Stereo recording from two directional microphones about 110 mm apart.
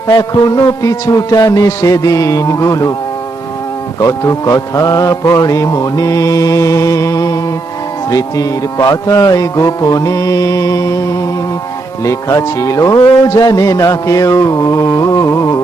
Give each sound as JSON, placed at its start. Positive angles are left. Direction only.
{"t": 0.1, "sound": "mantra", "side_deg": 35}
{"t": 4.0, "sound": "mantra", "side_deg": 30}
{"t": 12.0, "sound": "mantra", "side_deg": 30}